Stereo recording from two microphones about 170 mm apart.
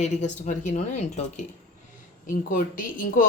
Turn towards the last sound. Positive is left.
turn(degrees=55)  # may be behind; listen again after turning